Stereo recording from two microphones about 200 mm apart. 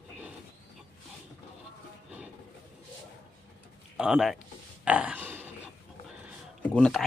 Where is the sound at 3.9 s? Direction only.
5° right (ahead or behind).